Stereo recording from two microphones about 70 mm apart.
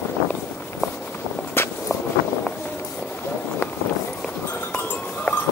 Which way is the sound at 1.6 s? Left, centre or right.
Left.